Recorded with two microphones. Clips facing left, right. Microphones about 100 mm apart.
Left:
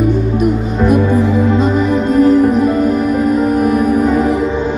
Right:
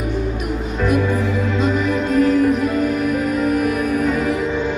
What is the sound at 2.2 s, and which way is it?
Music, 30° left (ahead or behind).